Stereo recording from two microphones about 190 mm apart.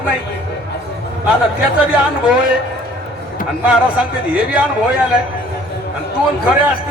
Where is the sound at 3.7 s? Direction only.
5° right (ahead or behind).